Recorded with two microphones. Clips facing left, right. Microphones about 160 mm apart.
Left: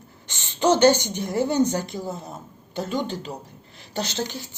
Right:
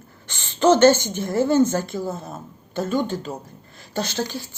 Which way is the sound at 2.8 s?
50° right (ahead or behind).